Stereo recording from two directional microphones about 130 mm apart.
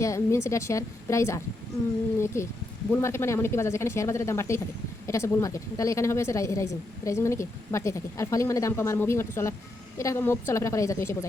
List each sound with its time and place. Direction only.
0.0 s a woman's voice: 25° left (ahead or behind)